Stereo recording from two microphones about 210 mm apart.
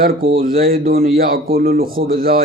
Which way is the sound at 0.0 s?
45° right (ahead or behind).